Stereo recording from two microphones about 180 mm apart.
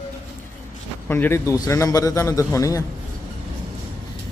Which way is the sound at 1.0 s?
10° left (ahead or behind).